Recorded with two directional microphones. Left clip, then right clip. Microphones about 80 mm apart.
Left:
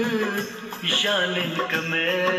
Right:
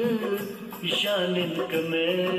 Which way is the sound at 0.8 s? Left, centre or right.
Right.